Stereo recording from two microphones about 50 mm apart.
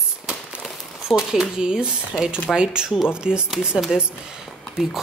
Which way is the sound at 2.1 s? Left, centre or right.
Centre.